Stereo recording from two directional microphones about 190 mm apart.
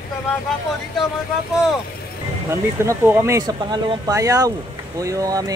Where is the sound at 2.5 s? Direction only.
15° right (ahead or behind).